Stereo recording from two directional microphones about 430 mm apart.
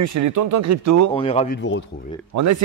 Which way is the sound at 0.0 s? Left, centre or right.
Right.